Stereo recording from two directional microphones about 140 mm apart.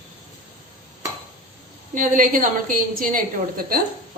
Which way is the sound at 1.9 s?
75° right (ahead or behind).